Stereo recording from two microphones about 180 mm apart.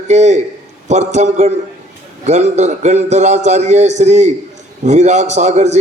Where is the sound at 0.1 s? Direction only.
40° right (ahead or behind).